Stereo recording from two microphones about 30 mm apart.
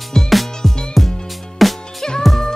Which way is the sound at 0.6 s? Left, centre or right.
Centre.